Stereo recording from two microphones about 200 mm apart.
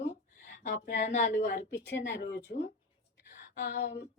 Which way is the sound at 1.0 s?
35° left (ahead or behind).